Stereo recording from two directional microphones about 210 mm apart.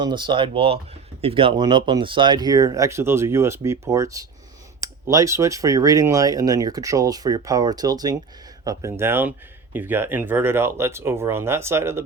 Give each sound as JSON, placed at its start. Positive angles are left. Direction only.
{"t": 0.0, "sound": "speech", "side_deg": -20}